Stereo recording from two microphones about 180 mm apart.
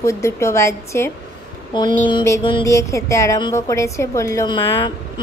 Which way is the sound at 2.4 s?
25° left (ahead or behind).